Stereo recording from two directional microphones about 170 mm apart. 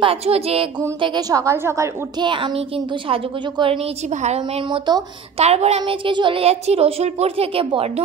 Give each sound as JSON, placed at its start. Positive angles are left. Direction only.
{"t": 0.0, "sound": "a woman's voice", "side_deg": -35}
{"t": 1.0, "sound": "a woman's voice", "side_deg": -25}
{"t": 4.6, "sound": "a woman's voice", "side_deg": -25}
{"t": 5.4, "sound": "a woman's voice", "side_deg": -40}